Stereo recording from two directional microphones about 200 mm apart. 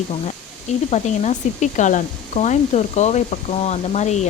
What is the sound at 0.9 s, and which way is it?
Speech, 35° left (ahead or behind).